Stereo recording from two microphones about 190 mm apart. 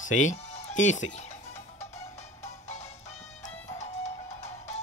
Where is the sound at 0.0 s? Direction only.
40° left (ahead or behind).